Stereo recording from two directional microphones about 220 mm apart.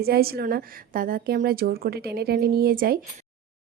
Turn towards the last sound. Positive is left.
turn(degrees=-40)  # may be behind; listen again after turning